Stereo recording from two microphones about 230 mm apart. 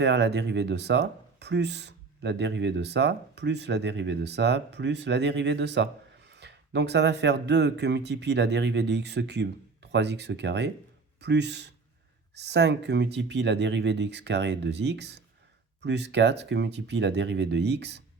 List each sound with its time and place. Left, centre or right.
0.0 s speech: right